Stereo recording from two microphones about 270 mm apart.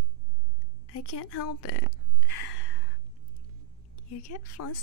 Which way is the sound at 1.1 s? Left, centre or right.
Left.